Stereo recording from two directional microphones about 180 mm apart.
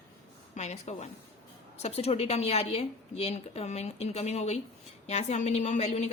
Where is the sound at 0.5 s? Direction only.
40° left (ahead or behind).